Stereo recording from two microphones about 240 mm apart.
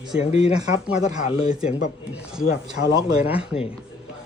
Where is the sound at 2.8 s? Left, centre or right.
Left.